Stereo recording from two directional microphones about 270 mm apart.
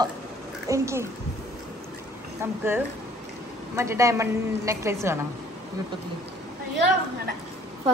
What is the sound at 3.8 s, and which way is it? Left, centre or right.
A woman's voice, centre.